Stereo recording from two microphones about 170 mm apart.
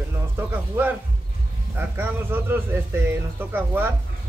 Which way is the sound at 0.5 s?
10° right (ahead or behind).